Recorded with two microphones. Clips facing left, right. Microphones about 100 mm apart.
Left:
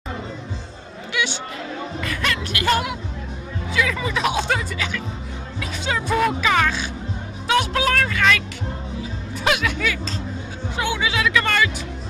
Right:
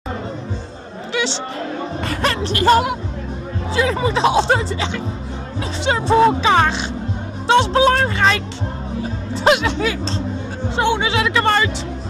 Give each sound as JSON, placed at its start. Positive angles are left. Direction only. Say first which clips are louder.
{"t": 1.1, "sound": "a sound", "louder": "right 4 dB", "side_deg": -30}
{"t": 2.0, "sound": "music", "louder": "right 5 dB", "side_deg": -35}
{"t": 3.7, "sound": "speech", "louder": "right 5 dB", "side_deg": -30}